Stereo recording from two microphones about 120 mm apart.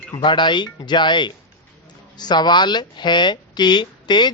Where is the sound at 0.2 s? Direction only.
40° left (ahead or behind).